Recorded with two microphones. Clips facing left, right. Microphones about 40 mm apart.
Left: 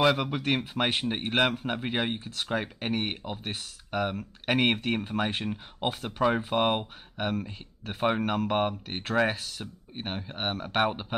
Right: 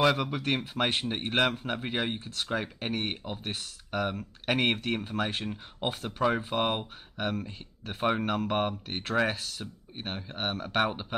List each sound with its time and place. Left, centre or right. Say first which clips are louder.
0.4 s speech: left 1 dB; centre